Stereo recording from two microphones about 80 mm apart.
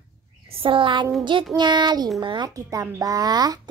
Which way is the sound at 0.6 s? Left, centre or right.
Right.